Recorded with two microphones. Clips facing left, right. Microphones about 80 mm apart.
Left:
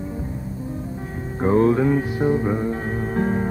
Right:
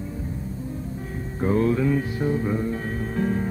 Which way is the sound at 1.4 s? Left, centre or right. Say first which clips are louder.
Left 4 dB; left.